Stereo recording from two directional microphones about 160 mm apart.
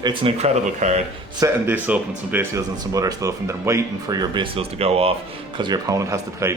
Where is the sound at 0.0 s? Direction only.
30° right (ahead or behind).